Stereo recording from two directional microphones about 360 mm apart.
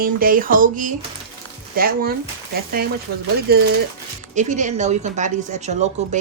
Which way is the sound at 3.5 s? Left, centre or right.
Right.